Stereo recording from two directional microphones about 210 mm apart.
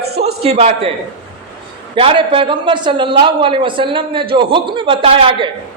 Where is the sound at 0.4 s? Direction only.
30° right (ahead or behind).